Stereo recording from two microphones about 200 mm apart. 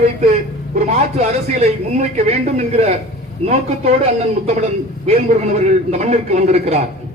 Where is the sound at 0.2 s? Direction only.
35° right (ahead or behind).